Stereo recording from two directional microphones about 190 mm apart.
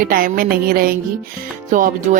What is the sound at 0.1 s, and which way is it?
Speech, 50° right (ahead or behind).